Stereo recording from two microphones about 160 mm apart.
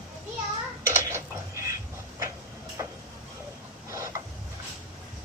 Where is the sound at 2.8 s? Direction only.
20° right (ahead or behind).